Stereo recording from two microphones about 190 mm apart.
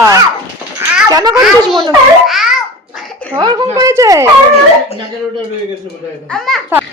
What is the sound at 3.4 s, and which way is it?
Speech, 20° right (ahead or behind).